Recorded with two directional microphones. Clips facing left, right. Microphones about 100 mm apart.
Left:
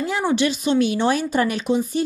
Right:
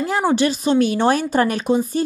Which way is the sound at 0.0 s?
40° right (ahead or behind).